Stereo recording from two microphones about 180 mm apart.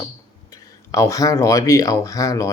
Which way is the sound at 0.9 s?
20° left (ahead or behind).